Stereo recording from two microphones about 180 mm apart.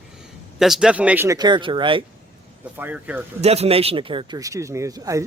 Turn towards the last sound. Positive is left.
turn(degrees=-15)  # may be behind; listen again after turning